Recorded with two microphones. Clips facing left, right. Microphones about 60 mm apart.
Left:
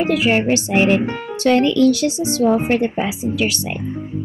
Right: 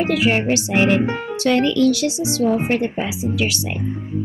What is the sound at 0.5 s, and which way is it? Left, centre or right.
Speech, left.